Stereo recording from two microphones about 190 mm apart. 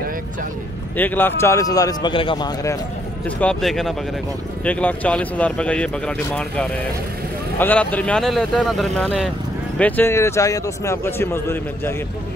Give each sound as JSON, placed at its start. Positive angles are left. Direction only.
{"t": 0.9, "sound": "a man's voice", "side_deg": 10}
{"t": 3.3, "sound": "a man's voice", "side_deg": 5}